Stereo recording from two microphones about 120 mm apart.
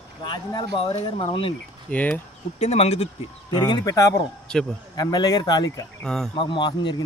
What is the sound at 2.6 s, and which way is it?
Speech, 60° left (ahead or behind).